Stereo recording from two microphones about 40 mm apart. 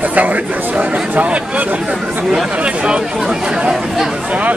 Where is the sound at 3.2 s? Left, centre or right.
Centre.